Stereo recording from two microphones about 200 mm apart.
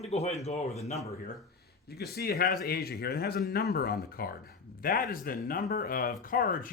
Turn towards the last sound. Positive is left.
turn(degrees=45)  # may be behind; listen again after turning